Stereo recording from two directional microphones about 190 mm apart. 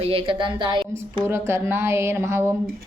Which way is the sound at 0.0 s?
30° right (ahead or behind).